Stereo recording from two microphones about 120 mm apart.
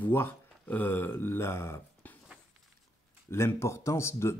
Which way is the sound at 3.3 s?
20° left (ahead or behind).